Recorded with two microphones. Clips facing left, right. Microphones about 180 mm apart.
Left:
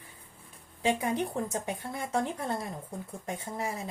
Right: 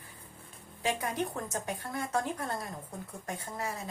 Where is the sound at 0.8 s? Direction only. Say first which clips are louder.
Left 4 dB; 25° left (ahead or behind).